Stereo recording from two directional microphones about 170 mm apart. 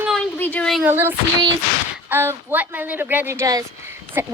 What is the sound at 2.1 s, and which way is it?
A woman's voice, 15° right (ahead or behind).